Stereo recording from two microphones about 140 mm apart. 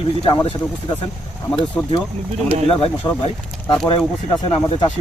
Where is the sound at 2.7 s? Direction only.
40° left (ahead or behind).